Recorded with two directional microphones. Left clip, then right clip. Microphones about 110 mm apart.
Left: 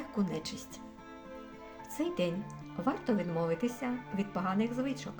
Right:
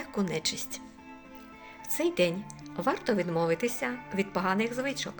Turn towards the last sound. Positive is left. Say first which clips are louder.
# right 4 dB
turn(degrees=-20)  # may be behind; listen again after turning